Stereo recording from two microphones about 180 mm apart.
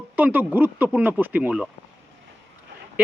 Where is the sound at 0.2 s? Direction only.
10° right (ahead or behind).